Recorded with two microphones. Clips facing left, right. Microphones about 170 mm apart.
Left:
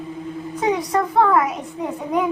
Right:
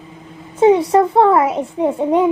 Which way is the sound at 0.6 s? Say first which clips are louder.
Right 9 dB; 30° right (ahead or behind).